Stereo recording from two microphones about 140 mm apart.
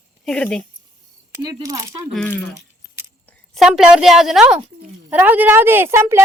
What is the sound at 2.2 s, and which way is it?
Speech, 15° left (ahead or behind).